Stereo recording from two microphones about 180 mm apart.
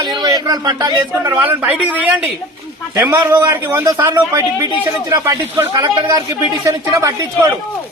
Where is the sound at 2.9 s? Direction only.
15° right (ahead or behind).